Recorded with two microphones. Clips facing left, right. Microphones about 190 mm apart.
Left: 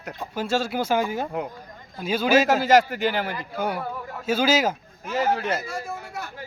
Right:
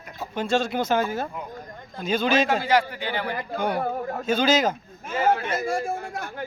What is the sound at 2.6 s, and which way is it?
Speech, 45° left (ahead or behind).